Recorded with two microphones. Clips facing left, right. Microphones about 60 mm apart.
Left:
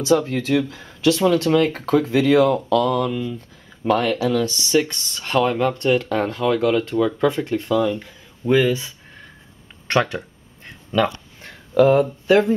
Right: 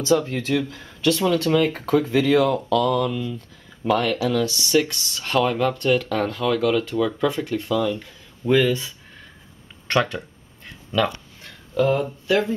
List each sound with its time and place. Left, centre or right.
0.0 s speech: centre
6.6 s speech: centre
11.9 s speech: left